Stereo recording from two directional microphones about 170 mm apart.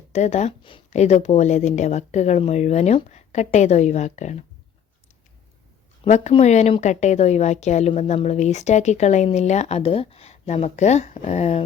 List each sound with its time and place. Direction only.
0.1 s speech: 40° left (ahead or behind)
6.1 s a woman's voice: 40° left (ahead or behind)